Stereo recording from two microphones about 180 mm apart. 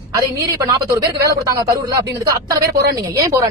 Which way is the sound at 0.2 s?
15° right (ahead or behind).